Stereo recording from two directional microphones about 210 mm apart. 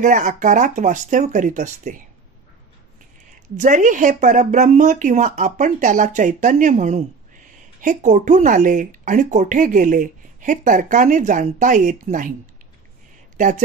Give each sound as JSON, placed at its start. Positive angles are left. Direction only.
{"t": 0.0, "sound": "speech", "side_deg": -40}
{"t": 3.5, "sound": "speech", "side_deg": -35}